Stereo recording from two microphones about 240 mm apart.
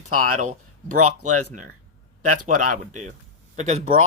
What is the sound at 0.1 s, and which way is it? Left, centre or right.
Speech, right.